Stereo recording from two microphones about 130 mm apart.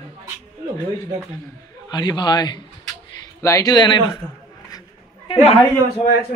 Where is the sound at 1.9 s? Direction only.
35° left (ahead or behind).